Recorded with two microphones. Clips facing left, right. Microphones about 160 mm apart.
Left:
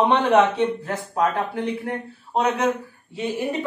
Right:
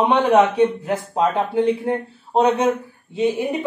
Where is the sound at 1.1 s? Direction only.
25° right (ahead or behind).